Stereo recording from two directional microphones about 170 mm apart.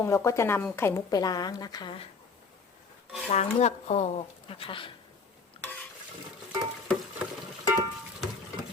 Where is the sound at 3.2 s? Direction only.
40° left (ahead or behind).